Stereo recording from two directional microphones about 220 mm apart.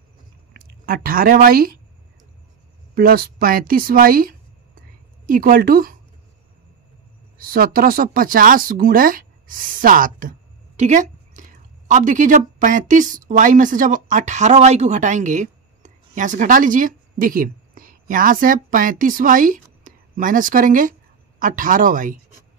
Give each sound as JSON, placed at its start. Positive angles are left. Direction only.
{"t": 0.5, "sound": "speech", "side_deg": -45}
{"t": 2.9, "sound": "speech", "side_deg": -40}
{"t": 7.3, "sound": "a woman's voice", "side_deg": -40}